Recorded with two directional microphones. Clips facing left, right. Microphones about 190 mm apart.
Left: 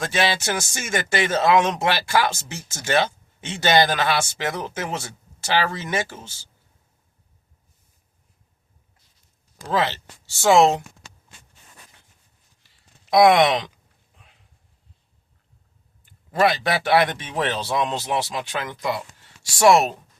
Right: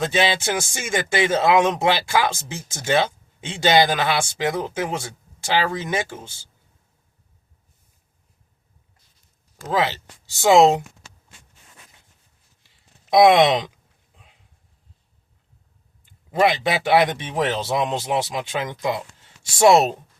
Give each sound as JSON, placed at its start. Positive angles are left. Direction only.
{"t": 0.0, "sound": "speech", "side_deg": -15}
{"t": 9.7, "sound": "speech", "side_deg": -10}
{"t": 13.1, "sound": "speech", "side_deg": -20}
{"t": 16.3, "sound": "speech", "side_deg": -20}